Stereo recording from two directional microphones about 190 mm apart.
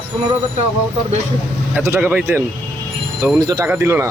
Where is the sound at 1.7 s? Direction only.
10° right (ahead or behind).